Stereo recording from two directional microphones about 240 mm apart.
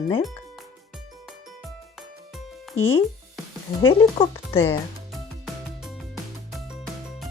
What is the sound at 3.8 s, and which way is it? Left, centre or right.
Speech, left.